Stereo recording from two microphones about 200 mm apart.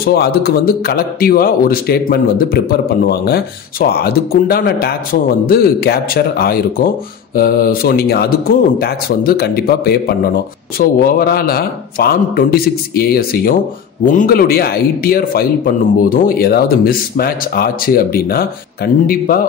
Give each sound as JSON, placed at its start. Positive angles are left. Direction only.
{"t": 0.0, "sound": "a man's voice", "side_deg": 50}